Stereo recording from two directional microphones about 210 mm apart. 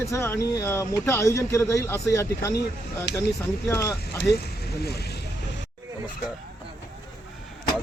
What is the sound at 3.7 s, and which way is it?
Speech, 10° left (ahead or behind).